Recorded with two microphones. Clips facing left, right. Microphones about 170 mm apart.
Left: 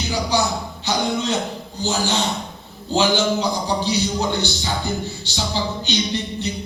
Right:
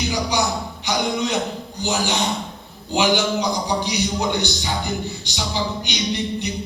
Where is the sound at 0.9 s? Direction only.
15° right (ahead or behind).